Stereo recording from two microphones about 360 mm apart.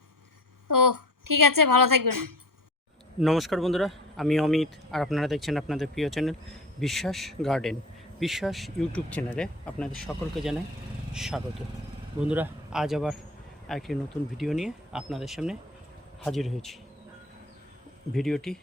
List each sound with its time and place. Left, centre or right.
0.7 s a woman's voice: right
3.2 s speech: centre
18.1 s speech: centre